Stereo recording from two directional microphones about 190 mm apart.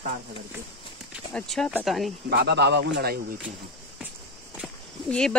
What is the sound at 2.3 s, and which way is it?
Speech, 60° right (ahead or behind).